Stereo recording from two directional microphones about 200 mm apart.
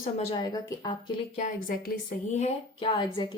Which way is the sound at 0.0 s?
30° left (ahead or behind).